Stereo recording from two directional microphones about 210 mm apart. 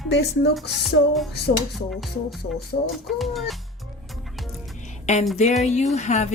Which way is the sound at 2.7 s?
65° left (ahead or behind).